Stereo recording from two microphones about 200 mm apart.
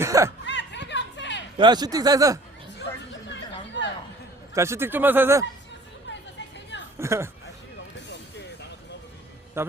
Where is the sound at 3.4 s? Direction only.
60° left (ahead or behind).